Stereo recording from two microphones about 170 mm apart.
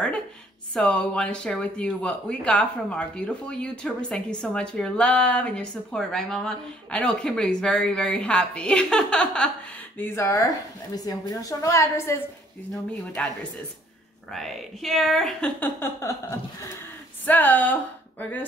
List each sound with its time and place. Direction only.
0.7 s a woman's voice: 5° left (ahead or behind)
14.3 s a woman's voice: centre (ahead or behind)